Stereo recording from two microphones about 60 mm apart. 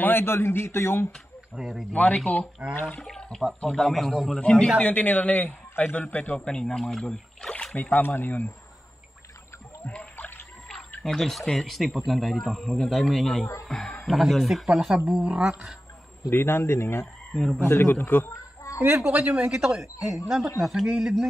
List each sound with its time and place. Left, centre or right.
0.0 s a man's voice: left
1.5 s a man's voice: centre
1.9 s a man's voice: left; by 4.4 s centre
4.4 s a man's voice: centre
7.7 s a man's voice: left
9.8 s splash: left
11.1 s a man's voice: centre
16.3 s speech: left
17.3 s speech: centre
17.6 s a man's voice: left
18.6 s a sound: left
19.0 s speech: right
19.3 s a man's voice: centre